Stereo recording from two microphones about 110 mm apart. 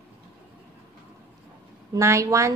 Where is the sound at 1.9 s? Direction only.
30° right (ahead or behind).